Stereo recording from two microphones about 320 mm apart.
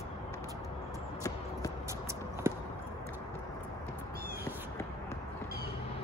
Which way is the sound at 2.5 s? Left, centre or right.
Centre.